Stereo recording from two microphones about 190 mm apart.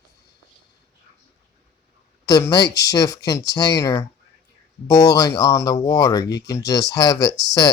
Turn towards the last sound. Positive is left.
turn(degrees=20)  # may be behind; listen again after turning